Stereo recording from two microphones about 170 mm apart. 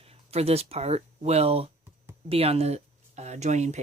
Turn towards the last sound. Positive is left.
turn(degrees=-40)  # may be behind; listen again after turning